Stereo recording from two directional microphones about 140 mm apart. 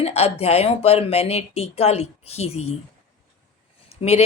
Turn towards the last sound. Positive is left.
turn(degrees=50)  # may be behind; listen again after turning